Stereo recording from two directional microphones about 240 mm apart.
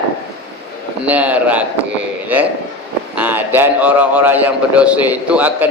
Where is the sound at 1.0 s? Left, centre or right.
Centre.